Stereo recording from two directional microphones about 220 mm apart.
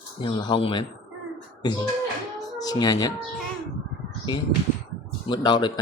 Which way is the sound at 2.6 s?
15° left (ahead or behind).